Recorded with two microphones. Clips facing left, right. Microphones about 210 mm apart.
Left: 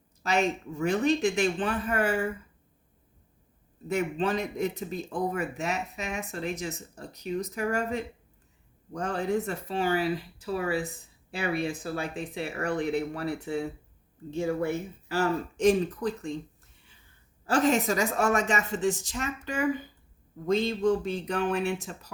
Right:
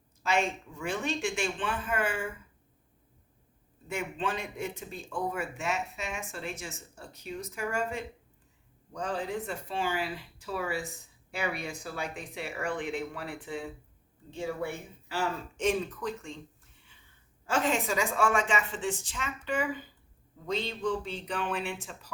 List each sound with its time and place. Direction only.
0.3 s speech: 40° left (ahead or behind)
3.8 s speech: 40° left (ahead or behind)
8.9 s speech: 45° left (ahead or behind)
17.4 s speech: 40° left (ahead or behind)